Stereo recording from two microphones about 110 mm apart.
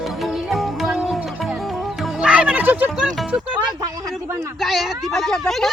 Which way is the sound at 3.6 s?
40° right (ahead or behind).